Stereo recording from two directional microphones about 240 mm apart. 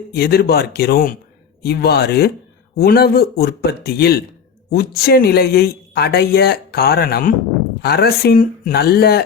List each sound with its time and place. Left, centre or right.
0.1 s speech: left